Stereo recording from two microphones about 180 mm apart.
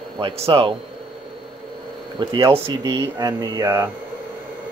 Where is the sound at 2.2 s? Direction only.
25° right (ahead or behind).